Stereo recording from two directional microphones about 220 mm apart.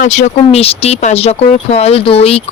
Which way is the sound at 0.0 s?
30° left (ahead or behind).